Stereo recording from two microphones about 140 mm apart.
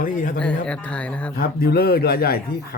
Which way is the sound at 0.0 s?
75° left (ahead or behind).